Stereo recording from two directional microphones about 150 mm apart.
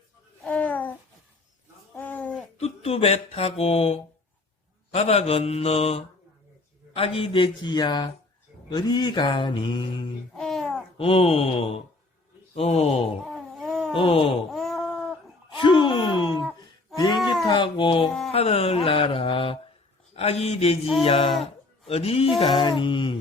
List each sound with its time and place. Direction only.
0.4 s a sound: 10° left (ahead or behind)
1.9 s livestock: 10° left (ahead or behind)
2.6 s speech: 40° left (ahead or behind)
10.3 s babbling: centre (ahead or behind)
10.9 s speech: 40° left (ahead or behind)
13.3 s cat: centre (ahead or behind)
13.9 s speech: 35° left (ahead or behind)
14.5 s a sound: centre (ahead or behind)
15.5 s gasp: 35° left (ahead or behind)
16.6 s a sound: 30° left (ahead or behind)
17.4 s speech: 35° left (ahead or behind)